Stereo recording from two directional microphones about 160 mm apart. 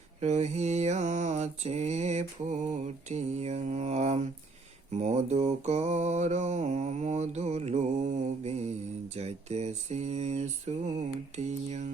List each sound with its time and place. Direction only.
0.2 s mantra: 45° right (ahead or behind)